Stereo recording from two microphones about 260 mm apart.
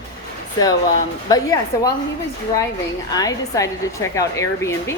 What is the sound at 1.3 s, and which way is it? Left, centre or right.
Speech, centre.